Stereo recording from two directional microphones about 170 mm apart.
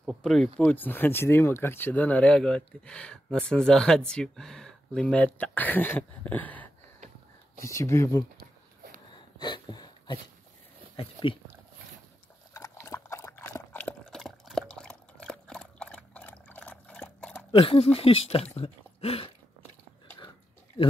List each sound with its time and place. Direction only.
0.0 s speech: centre (ahead or behind); by 8.5 s 20° left (ahead or behind)
9.1 s a sound: 25° left (ahead or behind)
11.0 s speech: 30° left (ahead or behind)
12.5 s liquid: 15° left (ahead or behind)
17.5 s speech: 30° left (ahead or behind)